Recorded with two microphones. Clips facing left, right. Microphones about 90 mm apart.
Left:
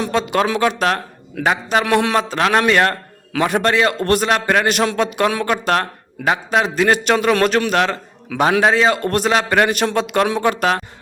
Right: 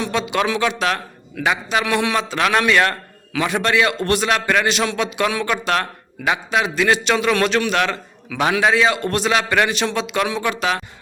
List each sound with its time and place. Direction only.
0.0 s a man's voice: 40° left (ahead or behind)